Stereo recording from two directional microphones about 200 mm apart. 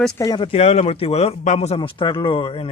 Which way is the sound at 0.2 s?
20° left (ahead or behind).